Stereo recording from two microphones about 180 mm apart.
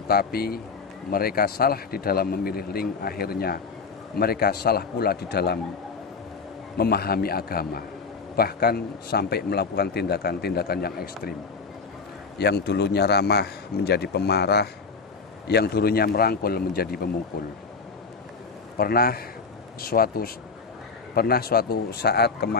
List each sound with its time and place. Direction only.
0.1 s a man's voice: 60° left (ahead or behind)
6.8 s a man's voice: 60° left (ahead or behind)
12.4 s a man's voice: 65° left (ahead or behind)
18.8 s a man's voice: 55° left (ahead or behind)